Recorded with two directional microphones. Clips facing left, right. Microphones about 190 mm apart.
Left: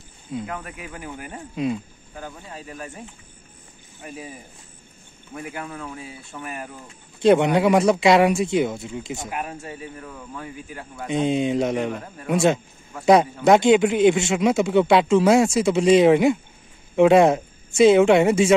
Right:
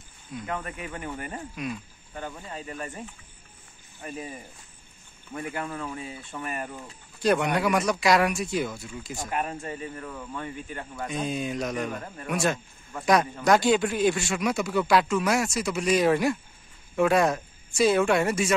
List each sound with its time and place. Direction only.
0.5 s speech: 5° left (ahead or behind)
1.5 s speech: 25° left (ahead or behind)
2.1 s speech: centre (ahead or behind)
4.0 s speech: 5° left (ahead or behind)
7.2 s speech: 25° left (ahead or behind)
9.3 s speech: 5° left (ahead or behind)
11.1 s speech: 25° left (ahead or behind)